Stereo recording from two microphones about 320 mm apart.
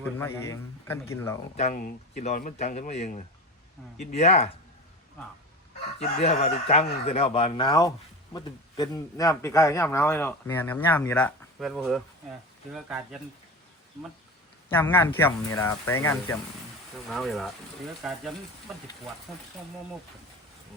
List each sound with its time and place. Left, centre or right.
0.0 s speech: centre
1.5 s speech: left
6.0 s speech: centre
14.7 s speech: centre